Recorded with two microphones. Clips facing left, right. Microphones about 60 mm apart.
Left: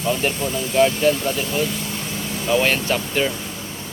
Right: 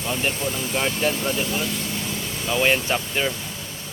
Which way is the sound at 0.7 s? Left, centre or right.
Centre.